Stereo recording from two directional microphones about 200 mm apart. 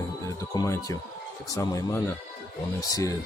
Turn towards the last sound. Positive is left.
turn(degrees=15)  # may be behind; listen again after turning